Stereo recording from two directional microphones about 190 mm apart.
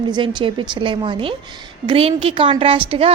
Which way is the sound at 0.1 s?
25° right (ahead or behind).